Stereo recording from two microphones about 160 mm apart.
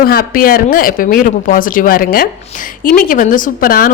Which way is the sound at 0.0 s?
65° left (ahead or behind).